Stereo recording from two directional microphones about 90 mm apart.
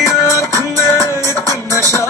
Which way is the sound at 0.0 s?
35° left (ahead or behind).